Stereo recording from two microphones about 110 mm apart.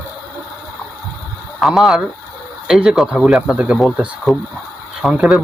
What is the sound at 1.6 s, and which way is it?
Speech, centre (ahead or behind).